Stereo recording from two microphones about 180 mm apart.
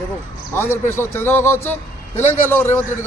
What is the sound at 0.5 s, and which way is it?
A man's voice, 15° left (ahead or behind).